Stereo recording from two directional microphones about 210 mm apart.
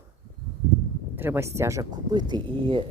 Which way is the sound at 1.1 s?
10° right (ahead or behind).